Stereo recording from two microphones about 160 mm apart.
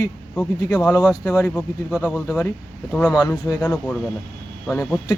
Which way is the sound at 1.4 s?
15° left (ahead or behind).